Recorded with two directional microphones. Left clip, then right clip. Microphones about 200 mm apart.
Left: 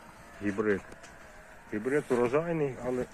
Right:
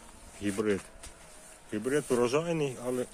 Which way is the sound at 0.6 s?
20° right (ahead or behind).